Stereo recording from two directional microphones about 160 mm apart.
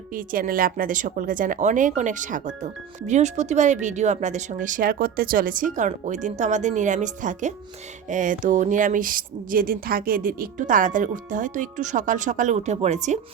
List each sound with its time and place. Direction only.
0.1 s a woman's voice: 60° right (ahead or behind)